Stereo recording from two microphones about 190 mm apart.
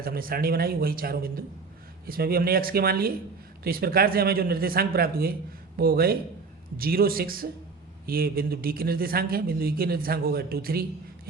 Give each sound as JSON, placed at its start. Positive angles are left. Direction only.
{"t": 0.0, "sound": "a man's voice", "side_deg": -50}